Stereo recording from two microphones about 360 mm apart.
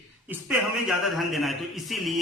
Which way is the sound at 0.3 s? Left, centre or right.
Centre.